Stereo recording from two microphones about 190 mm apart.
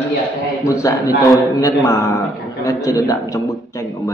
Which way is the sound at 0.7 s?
15° left (ahead or behind).